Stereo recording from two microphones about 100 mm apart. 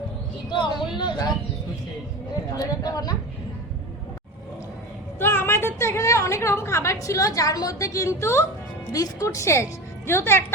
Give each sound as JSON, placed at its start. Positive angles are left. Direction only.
{"t": 0.5, "sound": "speech", "side_deg": 50}
{"t": 2.8, "sound": "speech", "side_deg": 40}
{"t": 5.2, "sound": "a woman's voice", "side_deg": 25}